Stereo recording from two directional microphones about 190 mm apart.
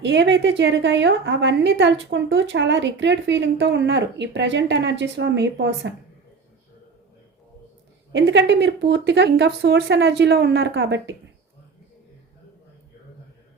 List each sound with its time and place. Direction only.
0.0 s a woman's voice: 70° right (ahead or behind)
8.1 s speech: 70° right (ahead or behind)